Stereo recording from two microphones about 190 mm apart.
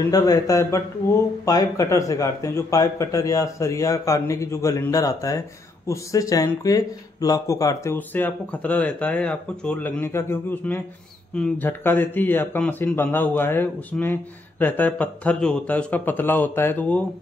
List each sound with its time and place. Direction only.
0.1 s speech: 20° left (ahead or behind)